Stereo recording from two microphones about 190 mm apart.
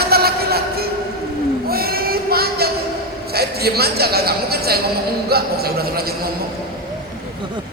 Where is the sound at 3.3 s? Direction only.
55° right (ahead or behind).